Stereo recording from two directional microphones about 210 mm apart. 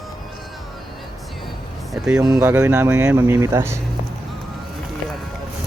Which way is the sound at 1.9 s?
5° right (ahead or behind).